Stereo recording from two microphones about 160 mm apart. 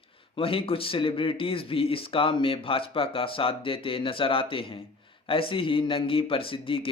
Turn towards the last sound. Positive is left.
turn(degrees=35)  # may be behind; listen again after turning